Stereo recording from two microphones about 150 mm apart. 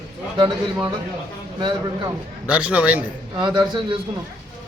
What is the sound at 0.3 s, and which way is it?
Speech, 30° right (ahead or behind).